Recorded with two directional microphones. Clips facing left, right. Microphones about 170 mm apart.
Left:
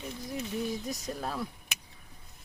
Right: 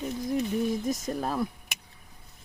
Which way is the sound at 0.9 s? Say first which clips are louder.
Right 6 dB; 50° right (ahead or behind).